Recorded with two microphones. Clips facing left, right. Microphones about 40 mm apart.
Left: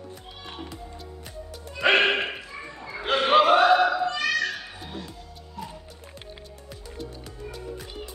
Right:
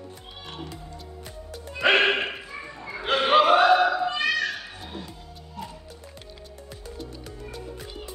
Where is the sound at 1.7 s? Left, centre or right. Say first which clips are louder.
Even; centre.